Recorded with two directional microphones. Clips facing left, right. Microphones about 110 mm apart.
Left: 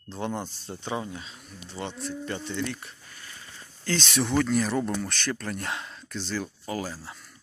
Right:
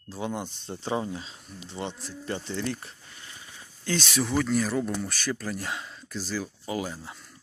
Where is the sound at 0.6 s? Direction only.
25° right (ahead or behind).